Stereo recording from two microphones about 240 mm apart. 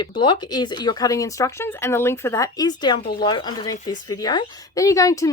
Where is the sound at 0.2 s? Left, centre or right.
Centre.